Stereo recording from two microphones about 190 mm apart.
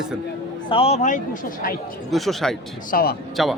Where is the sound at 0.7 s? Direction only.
30° left (ahead or behind); by 1.8 s 45° left (ahead or behind).